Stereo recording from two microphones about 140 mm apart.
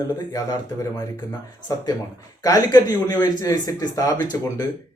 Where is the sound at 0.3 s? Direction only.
25° left (ahead or behind).